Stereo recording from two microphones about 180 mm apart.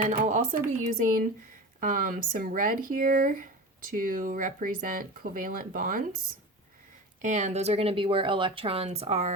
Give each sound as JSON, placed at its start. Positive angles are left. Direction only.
{"t": 0.1, "sound": "speech", "side_deg": -45}
{"t": 7.2, "sound": "speech", "side_deg": -40}